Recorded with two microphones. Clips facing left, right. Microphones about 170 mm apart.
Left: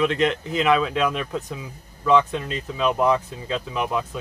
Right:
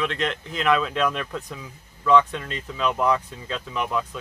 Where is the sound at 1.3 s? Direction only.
20° left (ahead or behind).